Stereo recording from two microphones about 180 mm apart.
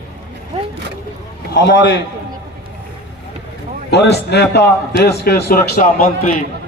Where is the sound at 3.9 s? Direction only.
70° left (ahead or behind).